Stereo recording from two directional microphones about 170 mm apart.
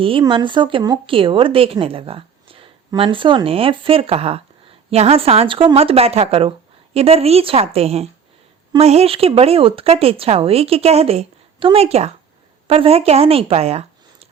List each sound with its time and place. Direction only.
0.0 s speech: 30° right (ahead or behind)